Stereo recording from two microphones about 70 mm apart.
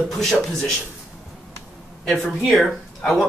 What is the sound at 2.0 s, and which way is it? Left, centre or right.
Speech, centre.